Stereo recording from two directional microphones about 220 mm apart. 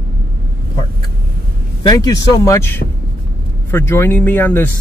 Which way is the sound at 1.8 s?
15° left (ahead or behind).